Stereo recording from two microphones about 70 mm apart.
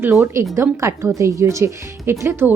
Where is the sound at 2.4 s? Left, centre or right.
Right.